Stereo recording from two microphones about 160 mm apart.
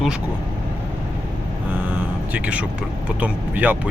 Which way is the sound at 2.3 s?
10° right (ahead or behind).